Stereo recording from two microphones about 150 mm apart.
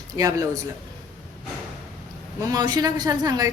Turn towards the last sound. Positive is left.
turn(degrees=-25)  # may be behind; listen again after turning